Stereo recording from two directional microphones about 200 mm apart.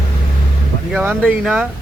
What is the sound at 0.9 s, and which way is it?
Speech, 5° right (ahead or behind).